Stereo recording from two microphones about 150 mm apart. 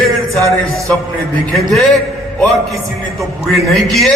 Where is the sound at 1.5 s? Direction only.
Centre (ahead or behind).